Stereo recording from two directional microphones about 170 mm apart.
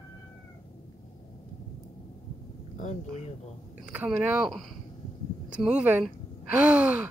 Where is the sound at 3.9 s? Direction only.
10° right (ahead or behind).